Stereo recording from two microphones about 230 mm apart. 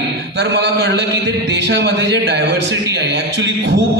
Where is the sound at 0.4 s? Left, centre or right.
Right.